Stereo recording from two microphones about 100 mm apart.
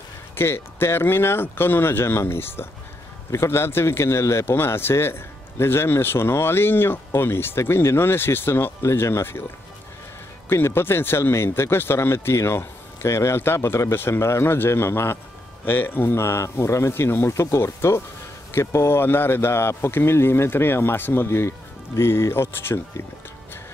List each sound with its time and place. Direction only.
0.4 s a man's voice: 25° left (ahead or behind)
10.5 s a man's voice: 25° left (ahead or behind)